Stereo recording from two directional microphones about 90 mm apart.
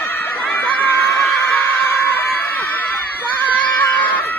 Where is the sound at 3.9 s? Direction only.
20° left (ahead or behind).